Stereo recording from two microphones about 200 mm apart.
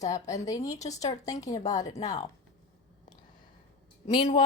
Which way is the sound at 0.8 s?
35° left (ahead or behind).